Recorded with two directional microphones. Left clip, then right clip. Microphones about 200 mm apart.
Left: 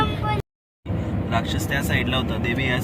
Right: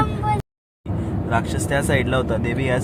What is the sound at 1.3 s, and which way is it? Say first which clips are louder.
Speech: right 3 dB; 45° right (ahead or behind).